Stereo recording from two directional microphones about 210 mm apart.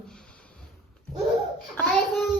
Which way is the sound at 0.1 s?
5° left (ahead or behind).